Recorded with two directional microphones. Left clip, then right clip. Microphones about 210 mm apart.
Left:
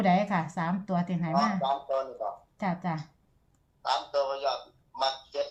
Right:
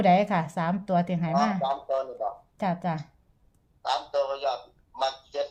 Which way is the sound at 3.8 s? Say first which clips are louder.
Right 1 dB; 25° right (ahead or behind).